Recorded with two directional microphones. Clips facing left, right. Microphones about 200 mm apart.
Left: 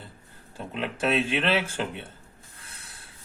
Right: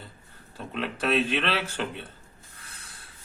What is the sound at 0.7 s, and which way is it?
Speech, 20° left (ahead or behind).